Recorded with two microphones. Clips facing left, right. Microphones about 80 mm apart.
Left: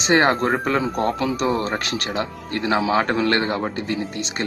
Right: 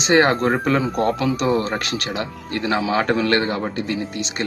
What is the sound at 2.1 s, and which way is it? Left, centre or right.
A man's voice, left.